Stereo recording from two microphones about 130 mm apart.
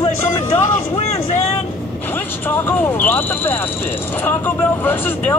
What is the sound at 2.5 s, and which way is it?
Speech, 15° left (ahead or behind).